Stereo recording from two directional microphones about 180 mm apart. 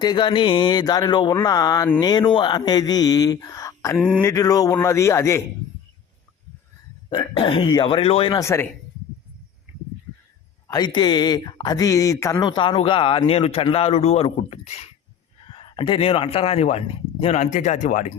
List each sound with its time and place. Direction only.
0.0 s speech: 25° left (ahead or behind)
7.1 s speech: 25° left (ahead or behind)
10.7 s speech: 25° left (ahead or behind); by 18.1 s 40° left (ahead or behind)